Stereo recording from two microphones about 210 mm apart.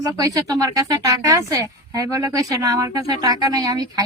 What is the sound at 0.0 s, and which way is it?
Speech, 15° right (ahead or behind).